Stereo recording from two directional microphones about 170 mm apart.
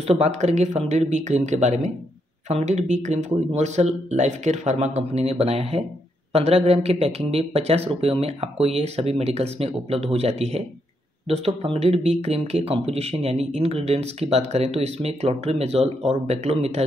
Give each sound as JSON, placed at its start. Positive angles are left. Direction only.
{"t": 0.0, "sound": "speech", "side_deg": -40}